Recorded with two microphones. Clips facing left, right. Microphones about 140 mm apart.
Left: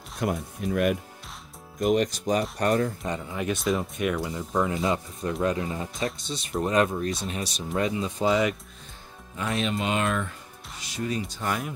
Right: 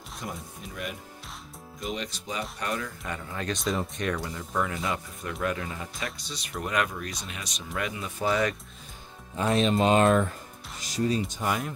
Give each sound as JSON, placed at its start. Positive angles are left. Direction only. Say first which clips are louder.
{"t": 0.2, "sound": "speech", "louder": "left 11 dB", "side_deg": 65}
{"t": 1.8, "sound": "speech", "louder": "left 11 dB", "side_deg": 55}
{"t": 3.3, "sound": "speech", "louder": "left 3 dB", "side_deg": 10}
{"t": 9.4, "sound": "speech", "louder": "right 5 dB", "side_deg": -30}
{"t": 11.4, "sound": "speech", "louder": "left 1 dB", "side_deg": 0}